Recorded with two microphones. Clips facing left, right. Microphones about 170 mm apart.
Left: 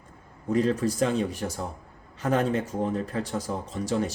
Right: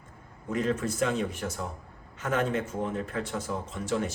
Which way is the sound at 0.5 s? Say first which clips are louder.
Left 5 dB; 35° left (ahead or behind).